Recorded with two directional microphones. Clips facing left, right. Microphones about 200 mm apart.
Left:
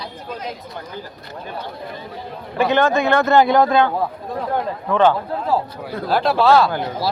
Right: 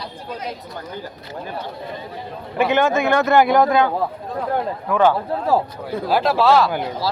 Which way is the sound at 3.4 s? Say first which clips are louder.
Even; 25° left (ahead or behind).